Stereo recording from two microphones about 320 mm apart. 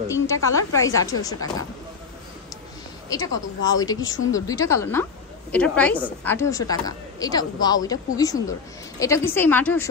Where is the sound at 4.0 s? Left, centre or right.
Left.